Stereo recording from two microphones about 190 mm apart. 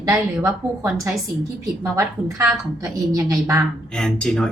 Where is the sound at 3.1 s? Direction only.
15° right (ahead or behind).